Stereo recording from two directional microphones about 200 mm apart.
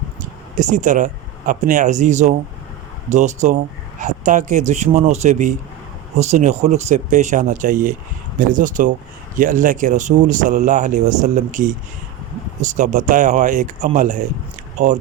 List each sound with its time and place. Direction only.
0.5 s speech: 40° right (ahead or behind)